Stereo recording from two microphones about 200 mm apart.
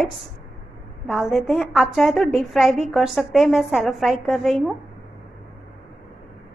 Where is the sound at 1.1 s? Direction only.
Centre (ahead or behind).